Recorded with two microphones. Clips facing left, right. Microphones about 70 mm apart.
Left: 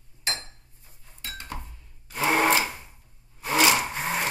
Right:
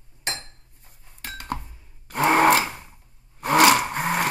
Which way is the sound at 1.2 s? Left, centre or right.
Right.